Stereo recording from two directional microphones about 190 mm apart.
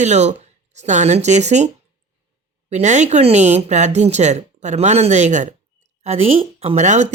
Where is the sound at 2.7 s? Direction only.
40° right (ahead or behind).